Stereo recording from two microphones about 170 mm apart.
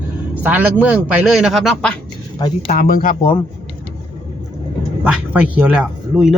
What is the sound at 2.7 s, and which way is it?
Speech, 55° left (ahead or behind).